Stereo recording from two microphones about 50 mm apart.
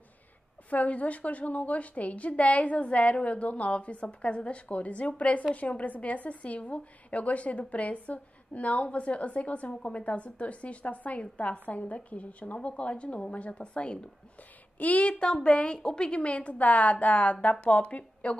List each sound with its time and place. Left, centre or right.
0.7 s a woman's voice: left